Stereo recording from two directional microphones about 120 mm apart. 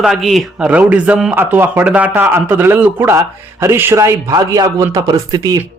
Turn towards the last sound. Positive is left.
turn(degrees=-35)  # may be behind; listen again after turning